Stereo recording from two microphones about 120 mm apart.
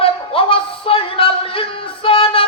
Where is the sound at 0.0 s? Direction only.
50° left (ahead or behind).